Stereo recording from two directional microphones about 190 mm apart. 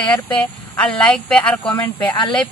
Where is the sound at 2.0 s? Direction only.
20° left (ahead or behind).